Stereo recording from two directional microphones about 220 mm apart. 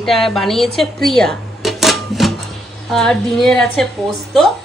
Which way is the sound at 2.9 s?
Centre (ahead or behind).